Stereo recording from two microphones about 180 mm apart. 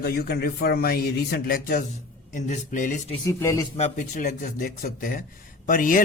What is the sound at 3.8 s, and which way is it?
Speech, 45° left (ahead or behind).